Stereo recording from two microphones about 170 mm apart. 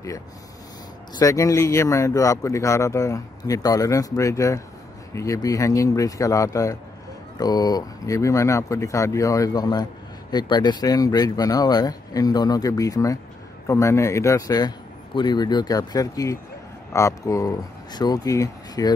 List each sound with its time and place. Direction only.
1.1 s speech: 20° left (ahead or behind)